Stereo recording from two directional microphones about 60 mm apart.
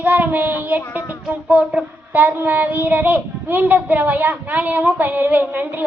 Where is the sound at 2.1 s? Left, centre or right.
Right.